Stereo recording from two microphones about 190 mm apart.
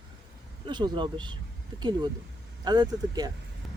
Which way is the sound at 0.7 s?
25° right (ahead or behind).